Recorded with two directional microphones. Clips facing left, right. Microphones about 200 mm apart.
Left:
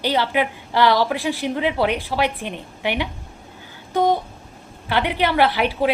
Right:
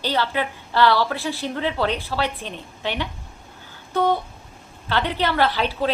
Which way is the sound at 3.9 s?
15° left (ahead or behind).